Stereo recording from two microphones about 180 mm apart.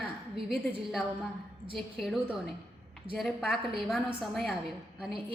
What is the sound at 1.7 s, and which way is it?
A woman's voice, centre (ahead or behind).